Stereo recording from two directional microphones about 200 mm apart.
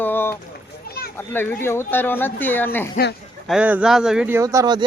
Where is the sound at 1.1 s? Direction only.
10° left (ahead or behind).